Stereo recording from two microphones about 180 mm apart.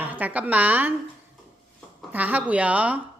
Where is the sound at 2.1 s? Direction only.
10° right (ahead or behind).